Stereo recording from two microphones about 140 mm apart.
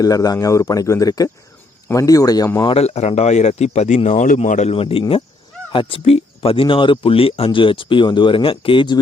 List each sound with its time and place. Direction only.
0.0 s speech: 25° left (ahead or behind)
2.6 s speech: 50° left (ahead or behind)
4.7 s speech: 40° left (ahead or behind)